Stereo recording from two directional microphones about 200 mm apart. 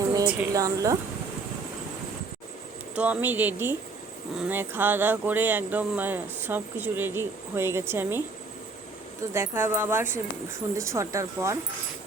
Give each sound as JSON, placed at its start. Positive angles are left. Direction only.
{"t": 0.1, "sound": "a woman's voice", "side_deg": -15}
{"t": 2.9, "sound": "speech", "side_deg": -10}
{"t": 9.3, "sound": "speech", "side_deg": -10}